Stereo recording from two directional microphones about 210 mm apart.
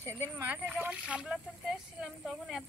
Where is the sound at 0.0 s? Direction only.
10° right (ahead or behind).